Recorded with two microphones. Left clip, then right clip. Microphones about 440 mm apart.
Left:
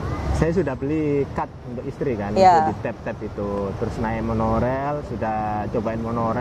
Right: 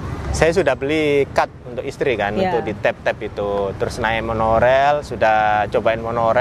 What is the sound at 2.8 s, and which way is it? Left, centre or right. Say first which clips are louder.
Speech: right 10 dB; right.